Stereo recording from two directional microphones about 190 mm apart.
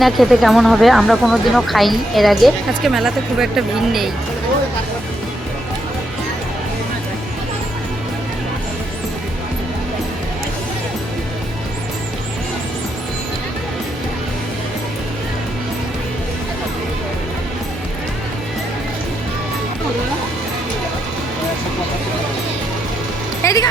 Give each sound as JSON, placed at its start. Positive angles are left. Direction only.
{"t": 0.0, "sound": "speech", "side_deg": 0}
{"t": 23.4, "sound": "music", "side_deg": 15}